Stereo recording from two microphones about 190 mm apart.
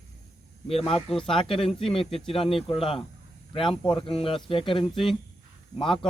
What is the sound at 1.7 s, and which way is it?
A man's voice, centre (ahead or behind).